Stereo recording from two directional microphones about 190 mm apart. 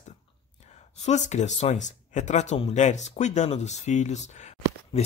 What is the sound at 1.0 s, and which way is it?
Speech, 35° left (ahead or behind).